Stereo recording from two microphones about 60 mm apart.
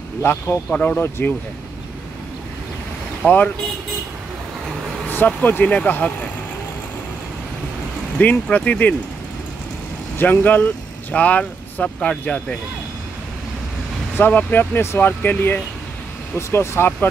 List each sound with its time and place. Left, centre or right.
0.5 s speech: left
3.2 s speech: left
5.1 s speech: left
8.2 s speech: left
10.1 s speech: left
14.1 s speech: left
16.3 s speech: left